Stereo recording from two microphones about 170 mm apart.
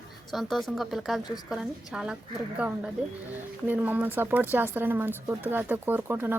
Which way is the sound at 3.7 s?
10° right (ahead or behind).